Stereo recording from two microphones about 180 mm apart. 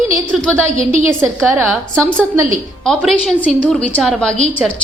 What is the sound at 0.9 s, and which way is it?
Speech, 15° right (ahead or behind).